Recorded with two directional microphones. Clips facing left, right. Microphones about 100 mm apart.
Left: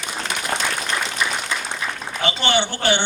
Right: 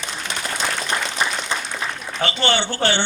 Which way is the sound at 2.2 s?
15° left (ahead or behind).